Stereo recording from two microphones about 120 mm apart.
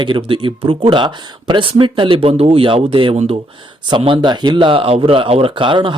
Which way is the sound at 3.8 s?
45° right (ahead or behind).